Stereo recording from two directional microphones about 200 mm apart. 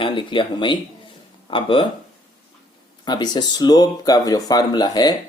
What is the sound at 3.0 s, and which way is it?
Speech, 20° left (ahead or behind).